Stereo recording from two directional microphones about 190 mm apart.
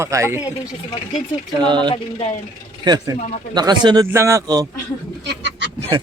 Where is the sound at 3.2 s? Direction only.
40° left (ahead or behind).